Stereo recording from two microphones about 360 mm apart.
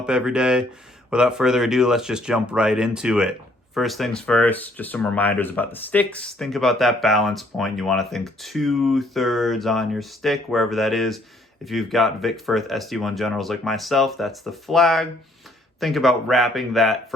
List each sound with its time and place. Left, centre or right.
0.0 s speech: centre